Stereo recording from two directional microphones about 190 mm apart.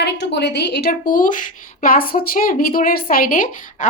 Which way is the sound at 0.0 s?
65° left (ahead or behind).